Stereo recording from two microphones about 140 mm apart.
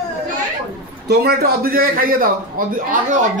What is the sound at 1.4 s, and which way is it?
A man's voice, 90° right.